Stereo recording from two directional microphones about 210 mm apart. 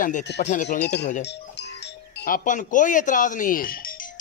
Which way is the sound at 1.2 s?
55° left (ahead or behind).